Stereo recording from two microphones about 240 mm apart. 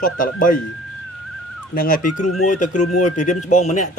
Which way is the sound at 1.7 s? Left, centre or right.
Left.